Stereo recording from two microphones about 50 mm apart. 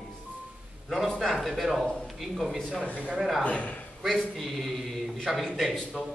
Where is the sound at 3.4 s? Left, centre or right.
Left.